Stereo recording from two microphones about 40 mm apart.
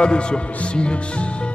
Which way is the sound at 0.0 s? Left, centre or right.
Left.